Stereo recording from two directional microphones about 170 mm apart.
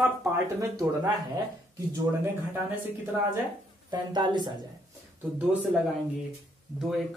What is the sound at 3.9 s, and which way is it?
Speech, 25° right (ahead or behind).